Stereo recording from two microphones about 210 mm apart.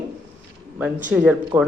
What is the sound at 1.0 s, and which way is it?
Speech, 5° right (ahead or behind).